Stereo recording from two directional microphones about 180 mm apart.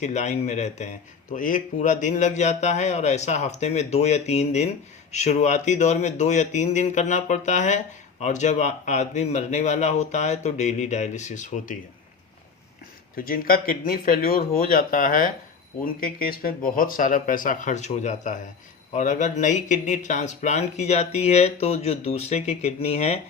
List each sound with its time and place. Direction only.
0.0 s speech: 40° left (ahead or behind)
13.1 s speech: 50° left (ahead or behind); by 23.2 s 35° left (ahead or behind)